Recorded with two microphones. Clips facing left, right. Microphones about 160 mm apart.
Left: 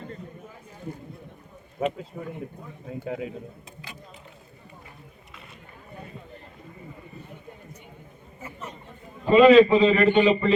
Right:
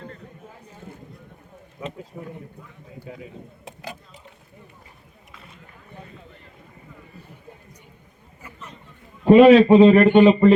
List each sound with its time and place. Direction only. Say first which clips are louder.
9.2 s a man's voice: right 3 dB; 75° right (ahead or behind); by 10.5 s 55° right (ahead or behind)